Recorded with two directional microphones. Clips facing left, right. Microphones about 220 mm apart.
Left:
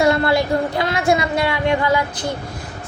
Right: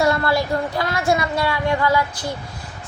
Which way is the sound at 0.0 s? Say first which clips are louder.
Left 3 dB; 20° left (ahead or behind).